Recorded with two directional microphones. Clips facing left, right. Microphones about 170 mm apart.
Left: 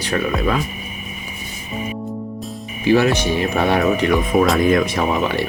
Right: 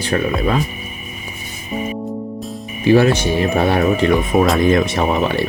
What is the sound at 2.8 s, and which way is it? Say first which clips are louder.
Speech: right 3 dB; 30° right (ahead or behind).